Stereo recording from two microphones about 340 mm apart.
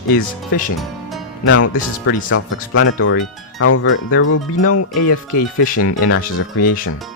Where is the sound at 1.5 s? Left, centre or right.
Left.